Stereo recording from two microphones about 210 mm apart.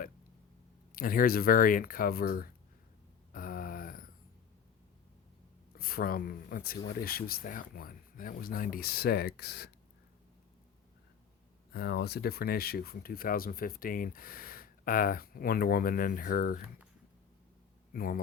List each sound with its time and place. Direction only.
0.9 s speech: 45° left (ahead or behind)
3.3 s a sound: 45° left (ahead or behind)
5.7 s speech: 45° left (ahead or behind)
11.7 s speech: 50° left (ahead or behind)
17.9 s a man's voice: 45° left (ahead or behind)